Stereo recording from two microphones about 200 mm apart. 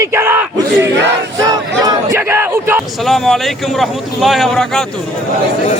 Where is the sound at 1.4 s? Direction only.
15° right (ahead or behind).